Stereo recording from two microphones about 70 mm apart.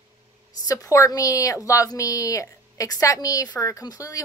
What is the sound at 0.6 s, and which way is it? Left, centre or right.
A woman's voice, left.